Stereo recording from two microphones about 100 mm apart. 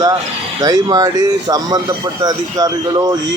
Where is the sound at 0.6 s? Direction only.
40° right (ahead or behind).